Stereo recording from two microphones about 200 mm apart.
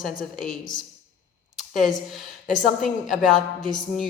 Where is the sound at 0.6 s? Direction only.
20° left (ahead or behind).